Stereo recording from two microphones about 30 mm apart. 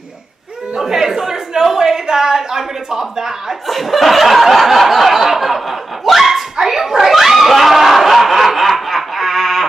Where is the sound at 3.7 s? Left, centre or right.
Centre.